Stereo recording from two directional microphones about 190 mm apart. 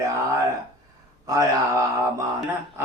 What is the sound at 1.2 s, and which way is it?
Speech, 15° right (ahead or behind).